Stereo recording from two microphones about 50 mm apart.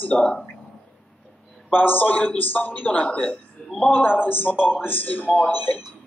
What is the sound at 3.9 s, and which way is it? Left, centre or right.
Speech, left.